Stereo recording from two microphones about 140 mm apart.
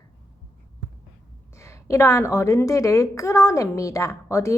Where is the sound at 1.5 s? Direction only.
20° left (ahead or behind).